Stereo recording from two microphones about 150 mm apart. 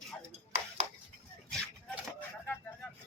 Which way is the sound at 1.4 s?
5° left (ahead or behind).